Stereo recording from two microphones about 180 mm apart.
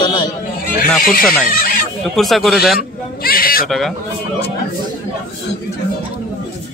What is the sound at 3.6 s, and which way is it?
Speech, centre (ahead or behind).